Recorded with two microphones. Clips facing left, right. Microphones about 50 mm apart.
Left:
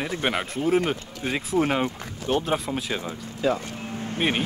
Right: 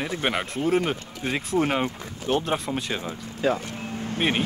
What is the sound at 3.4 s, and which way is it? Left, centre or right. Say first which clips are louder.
Speech: even; right.